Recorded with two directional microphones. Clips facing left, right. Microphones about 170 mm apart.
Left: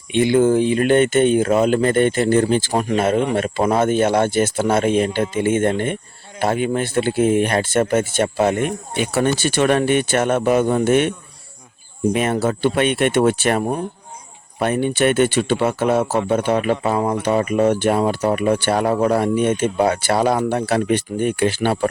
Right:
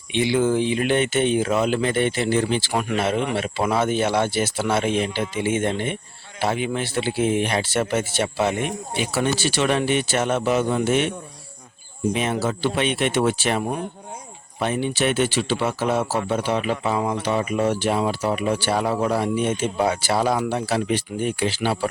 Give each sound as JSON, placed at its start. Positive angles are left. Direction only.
{"t": 0.1, "sound": "speech", "side_deg": 50}
{"t": 12.1, "sound": "speech", "side_deg": 55}
{"t": 14.6, "sound": "speech", "side_deg": 55}